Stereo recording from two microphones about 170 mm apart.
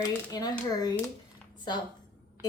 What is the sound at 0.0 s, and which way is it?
Speech, 20° left (ahead or behind).